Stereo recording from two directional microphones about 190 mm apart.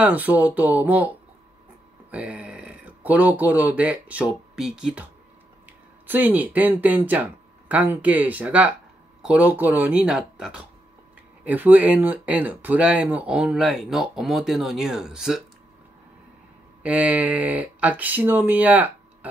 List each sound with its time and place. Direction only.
0.0 s speech: 10° right (ahead or behind)
6.0 s speech: 10° right (ahead or behind)
16.8 s speech: 5° right (ahead or behind)